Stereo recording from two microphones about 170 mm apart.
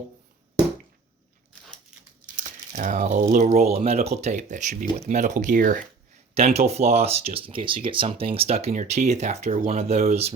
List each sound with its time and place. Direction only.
2.3 s a sound: 50° right (ahead or behind)
3.3 s speech: 45° right (ahead or behind)
6.3 s speech: 40° right (ahead or behind)